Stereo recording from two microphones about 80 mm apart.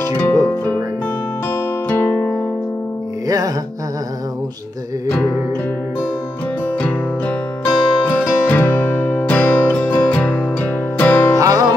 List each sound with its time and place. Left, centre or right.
1.9 s music: left
3.3 s music: right
6.8 s music: centre
11.3 s music: right